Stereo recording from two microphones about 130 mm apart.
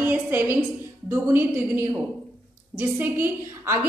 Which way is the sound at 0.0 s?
15° right (ahead or behind).